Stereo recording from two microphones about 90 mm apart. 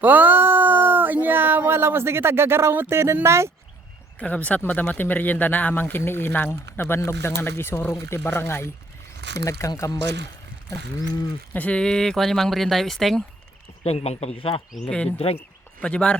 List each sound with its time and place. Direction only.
0.0 s a sound: 20° right (ahead or behind)
2.9 s speech: 25° right (ahead or behind)
4.2 s speech: 15° left (ahead or behind)
9.5 s speech: 35° left (ahead or behind)
11.5 s speech: 15° left (ahead or behind)
13.8 s speech: 90° left
14.8 s speech: 10° left (ahead or behind)